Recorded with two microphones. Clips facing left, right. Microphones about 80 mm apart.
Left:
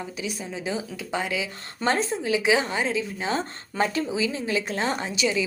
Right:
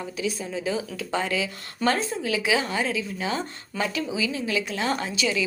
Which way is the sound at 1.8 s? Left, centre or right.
Left.